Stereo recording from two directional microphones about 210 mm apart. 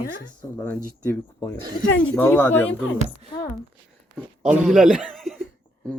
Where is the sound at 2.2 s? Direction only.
10° left (ahead or behind).